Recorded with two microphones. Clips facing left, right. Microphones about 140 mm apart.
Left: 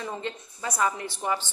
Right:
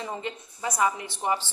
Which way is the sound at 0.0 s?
15° right (ahead or behind).